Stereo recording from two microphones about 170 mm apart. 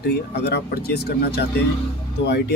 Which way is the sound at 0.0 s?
75° left (ahead or behind).